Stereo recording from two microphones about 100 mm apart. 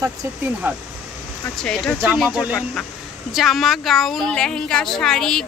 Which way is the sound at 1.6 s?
10° left (ahead or behind).